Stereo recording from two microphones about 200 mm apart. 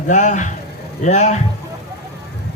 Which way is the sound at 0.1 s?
40° left (ahead or behind).